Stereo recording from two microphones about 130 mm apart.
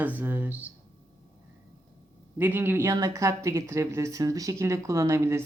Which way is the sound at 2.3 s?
15° right (ahead or behind).